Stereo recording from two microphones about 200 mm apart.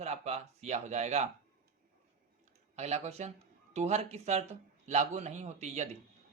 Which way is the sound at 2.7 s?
35° right (ahead or behind).